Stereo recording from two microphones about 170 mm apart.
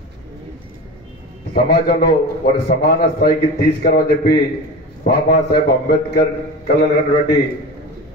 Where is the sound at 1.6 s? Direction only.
65° left (ahead or behind).